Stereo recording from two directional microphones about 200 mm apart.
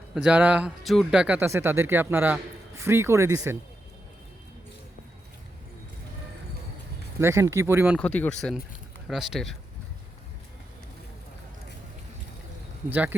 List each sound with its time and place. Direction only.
0.1 s speech: 5° right (ahead or behind)
7.2 s speech: 15° right (ahead or behind)
7.9 s speech: 5° left (ahead or behind)
12.9 s speech: 10° right (ahead or behind)